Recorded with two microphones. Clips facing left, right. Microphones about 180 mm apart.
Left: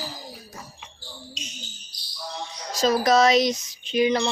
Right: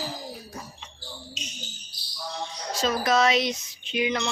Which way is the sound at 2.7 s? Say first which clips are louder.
Left 4 dB; 40° left (ahead or behind).